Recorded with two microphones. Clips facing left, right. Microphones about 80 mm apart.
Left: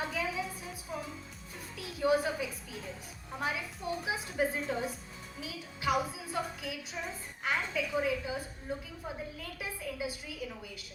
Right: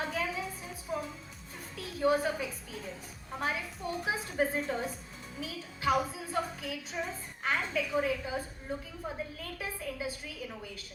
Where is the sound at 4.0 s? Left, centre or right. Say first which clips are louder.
Right 2 dB; right.